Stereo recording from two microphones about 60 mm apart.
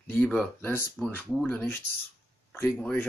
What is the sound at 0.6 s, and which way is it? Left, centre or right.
Speech, left.